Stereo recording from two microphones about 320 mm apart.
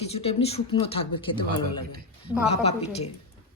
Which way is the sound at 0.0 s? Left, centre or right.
Centre.